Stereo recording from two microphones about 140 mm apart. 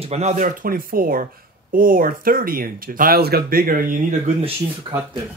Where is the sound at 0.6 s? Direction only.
90° right.